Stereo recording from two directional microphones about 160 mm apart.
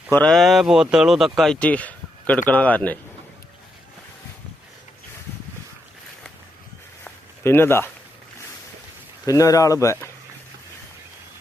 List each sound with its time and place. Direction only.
0.1 s speech: 5° left (ahead or behind)
7.0 s a sound: 15° left (ahead or behind)
9.2 s speech: 20° left (ahead or behind)